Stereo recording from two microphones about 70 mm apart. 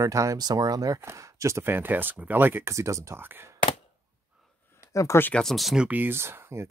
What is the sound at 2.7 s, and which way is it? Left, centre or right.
Speech, right.